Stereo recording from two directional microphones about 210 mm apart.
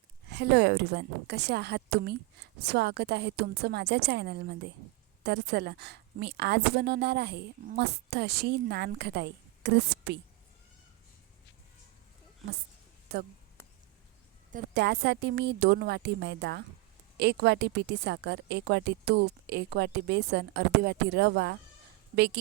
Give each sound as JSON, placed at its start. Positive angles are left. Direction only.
{"t": 0.3, "sound": "a woman's voice", "side_deg": -55}
{"t": 13.1, "sound": "a woman's voice", "side_deg": -50}
{"t": 14.5, "sound": "a woman's voice", "side_deg": -50}